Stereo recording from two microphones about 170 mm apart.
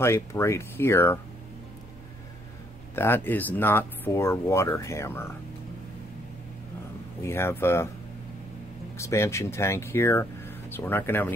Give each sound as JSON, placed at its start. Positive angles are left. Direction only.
{"t": 0.0, "sound": "speech", "side_deg": 15}
{"t": 3.0, "sound": "speech", "side_deg": 10}
{"t": 7.2, "sound": "speech", "side_deg": 15}
{"t": 8.9, "sound": "speech", "side_deg": 15}